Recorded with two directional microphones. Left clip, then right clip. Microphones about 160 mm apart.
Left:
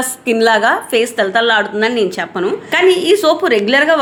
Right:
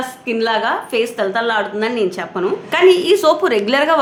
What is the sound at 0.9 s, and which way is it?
A woman's voice, 25° left (ahead or behind).